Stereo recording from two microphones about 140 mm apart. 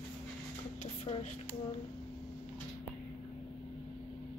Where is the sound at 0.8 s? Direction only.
45° left (ahead or behind).